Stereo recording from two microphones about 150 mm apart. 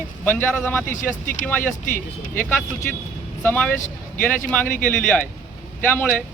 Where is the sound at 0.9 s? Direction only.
60° left (ahead or behind).